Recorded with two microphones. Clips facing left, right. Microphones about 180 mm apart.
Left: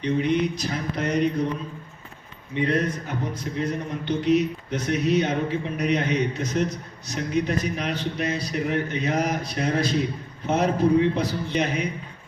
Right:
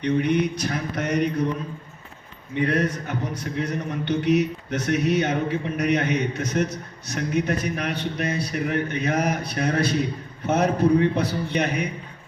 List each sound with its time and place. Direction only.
0.0 s speech: 65° right (ahead or behind)
2.6 s speech: 65° right (ahead or behind)